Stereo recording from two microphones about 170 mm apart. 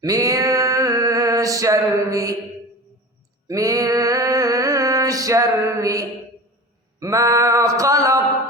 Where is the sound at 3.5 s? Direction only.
20° right (ahead or behind).